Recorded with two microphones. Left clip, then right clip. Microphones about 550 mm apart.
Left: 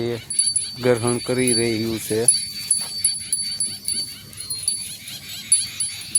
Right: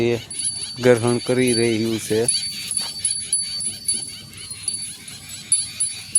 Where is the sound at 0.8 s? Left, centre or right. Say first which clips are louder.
Right 4 dB; left.